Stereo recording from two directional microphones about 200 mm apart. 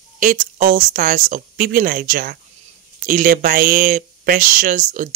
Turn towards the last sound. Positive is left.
turn(degrees=-40)  # may be behind; listen again after turning